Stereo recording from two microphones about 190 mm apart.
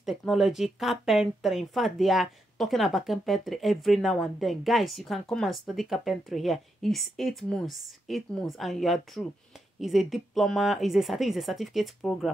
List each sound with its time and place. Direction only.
0.0 s speech: centre (ahead or behind)